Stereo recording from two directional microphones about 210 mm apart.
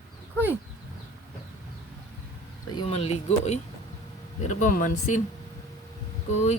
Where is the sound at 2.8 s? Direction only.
30° left (ahead or behind).